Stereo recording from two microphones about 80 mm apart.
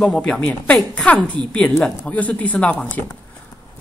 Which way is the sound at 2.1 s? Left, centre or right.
Centre.